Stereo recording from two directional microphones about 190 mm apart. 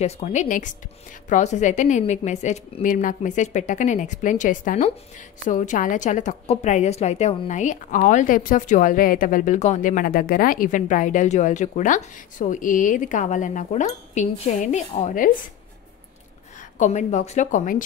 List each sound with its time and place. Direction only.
0.0 s a woman's voice: 35° left (ahead or behind)
16.7 s a woman's voice: 40° left (ahead or behind)